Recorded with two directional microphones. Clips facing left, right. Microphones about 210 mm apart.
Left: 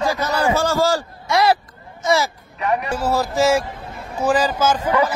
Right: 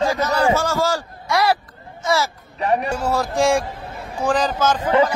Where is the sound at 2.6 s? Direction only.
30° right (ahead or behind).